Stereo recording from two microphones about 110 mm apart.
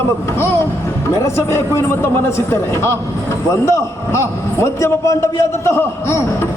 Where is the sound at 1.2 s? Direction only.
25° left (ahead or behind).